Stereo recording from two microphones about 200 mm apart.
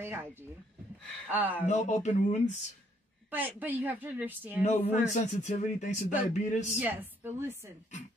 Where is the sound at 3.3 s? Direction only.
10° right (ahead or behind).